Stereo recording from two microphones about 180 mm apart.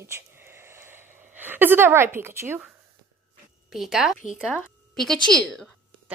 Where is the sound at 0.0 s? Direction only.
15° right (ahead or behind).